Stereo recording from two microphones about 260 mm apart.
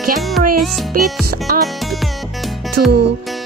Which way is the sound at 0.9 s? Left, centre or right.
Right.